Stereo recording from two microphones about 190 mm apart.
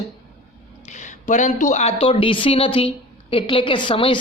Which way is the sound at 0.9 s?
40° left (ahead or behind).